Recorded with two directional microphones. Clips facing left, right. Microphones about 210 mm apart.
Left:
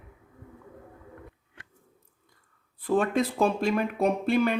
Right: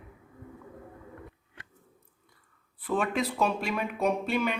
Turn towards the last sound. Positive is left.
turn(degrees=35)  # may be behind; listen again after turning